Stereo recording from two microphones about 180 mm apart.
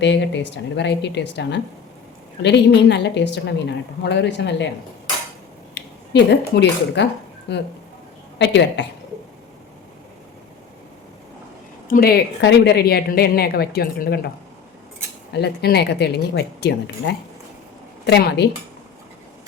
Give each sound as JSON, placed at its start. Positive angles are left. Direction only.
{"t": 0.0, "sound": "a woman's voice", "side_deg": 75}
{"t": 5.7, "sound": "a woman's voice", "side_deg": 70}
{"t": 11.9, "sound": "a woman's voice", "side_deg": 55}
{"t": 15.3, "sound": "a woman's voice", "side_deg": 65}